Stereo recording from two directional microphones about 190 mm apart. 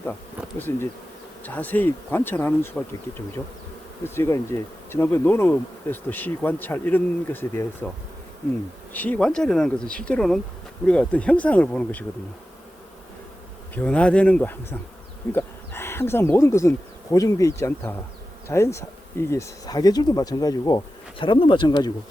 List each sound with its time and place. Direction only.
1.5 s bee: 10° left (ahead or behind)
4.0 s bee: 15° left (ahead or behind)
8.9 s speech: 10° left (ahead or behind)
13.7 s bee: 5° left (ahead or behind)
15.3 s speech: 10° left (ahead or behind)
18.4 s bee: 15° left (ahead or behind)
19.3 s speech: 15° left (ahead or behind)